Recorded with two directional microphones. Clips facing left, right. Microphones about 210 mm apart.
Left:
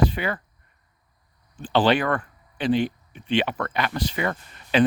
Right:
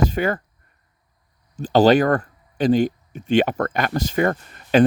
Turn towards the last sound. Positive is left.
turn(degrees=-45)  # may be behind; listen again after turning